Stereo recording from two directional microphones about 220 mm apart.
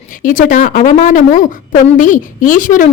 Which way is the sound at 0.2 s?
35° left (ahead or behind).